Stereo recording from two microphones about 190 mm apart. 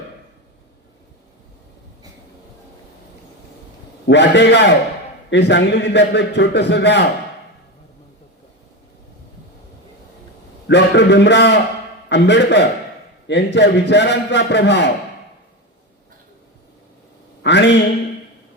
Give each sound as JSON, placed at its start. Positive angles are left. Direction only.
{"t": 4.0, "sound": "a man's voice", "side_deg": 65}
{"t": 10.7, "sound": "a man's voice", "side_deg": 65}
{"t": 17.4, "sound": "a man's voice", "side_deg": 65}